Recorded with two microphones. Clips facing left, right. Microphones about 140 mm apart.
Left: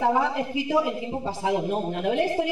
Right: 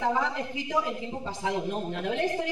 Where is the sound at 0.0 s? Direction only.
10° left (ahead or behind).